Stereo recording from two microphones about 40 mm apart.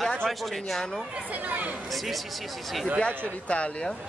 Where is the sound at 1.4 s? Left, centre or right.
Right.